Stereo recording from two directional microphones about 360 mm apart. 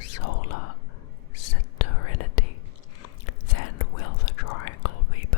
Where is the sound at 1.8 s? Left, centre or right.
Left.